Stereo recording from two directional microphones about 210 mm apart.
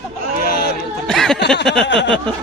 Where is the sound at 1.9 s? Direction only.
55° left (ahead or behind).